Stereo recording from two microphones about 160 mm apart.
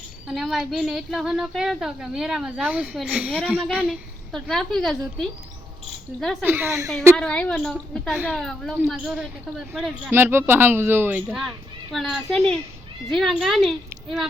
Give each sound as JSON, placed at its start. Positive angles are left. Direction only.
{"t": 0.3, "sound": "a woman's voice", "side_deg": 0}
{"t": 3.8, "sound": "a woman's voice", "side_deg": 0}
{"t": 6.4, "sound": "speech", "side_deg": -15}
{"t": 7.2, "sound": "a woman's voice", "side_deg": 10}
{"t": 10.1, "sound": "a woman's voice", "side_deg": -15}